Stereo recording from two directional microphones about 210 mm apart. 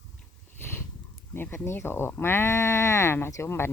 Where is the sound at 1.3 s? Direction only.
10° left (ahead or behind).